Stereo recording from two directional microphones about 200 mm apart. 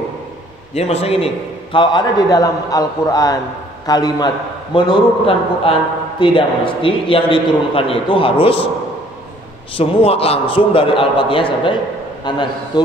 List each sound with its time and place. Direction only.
0.7 s a man's voice: 30° left (ahead or behind)
9.8 s a man's voice: 30° left (ahead or behind)